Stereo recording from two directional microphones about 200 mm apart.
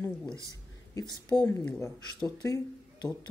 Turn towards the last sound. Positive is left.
turn(degrees=15)  # may be behind; listen again after turning